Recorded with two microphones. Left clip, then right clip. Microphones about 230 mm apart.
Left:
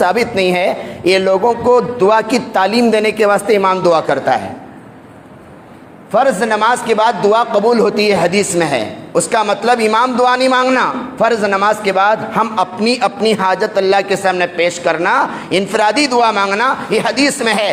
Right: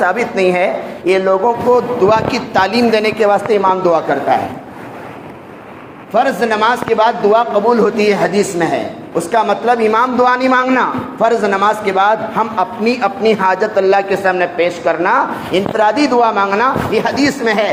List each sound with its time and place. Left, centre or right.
0.0 s a man's voice: left
6.1 s a man's voice: left